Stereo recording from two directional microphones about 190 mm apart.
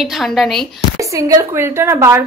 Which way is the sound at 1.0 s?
15° right (ahead or behind).